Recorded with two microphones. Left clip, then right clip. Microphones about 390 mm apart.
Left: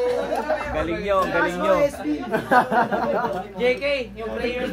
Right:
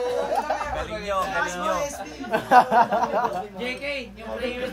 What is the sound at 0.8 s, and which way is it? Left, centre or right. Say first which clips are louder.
Speech: left 5 dB; centre.